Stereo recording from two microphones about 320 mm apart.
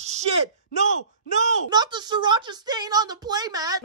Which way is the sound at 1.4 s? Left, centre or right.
Centre.